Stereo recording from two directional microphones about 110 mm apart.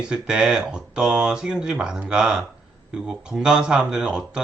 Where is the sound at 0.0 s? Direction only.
5° right (ahead or behind).